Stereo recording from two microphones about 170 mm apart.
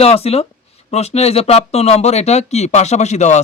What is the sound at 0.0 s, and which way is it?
Speech, 35° left (ahead or behind).